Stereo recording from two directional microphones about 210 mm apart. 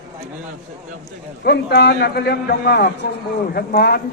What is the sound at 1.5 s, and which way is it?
A man's voice, 50° left (ahead or behind).